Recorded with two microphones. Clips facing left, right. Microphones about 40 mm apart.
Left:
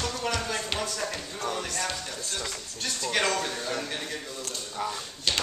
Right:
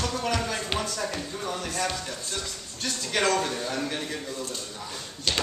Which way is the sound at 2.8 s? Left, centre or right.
Centre.